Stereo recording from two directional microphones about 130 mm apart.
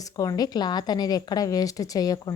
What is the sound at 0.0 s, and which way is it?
A woman's voice, 25° left (ahead or behind).